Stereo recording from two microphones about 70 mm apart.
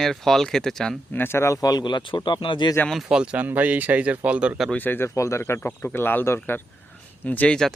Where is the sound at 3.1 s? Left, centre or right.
Centre.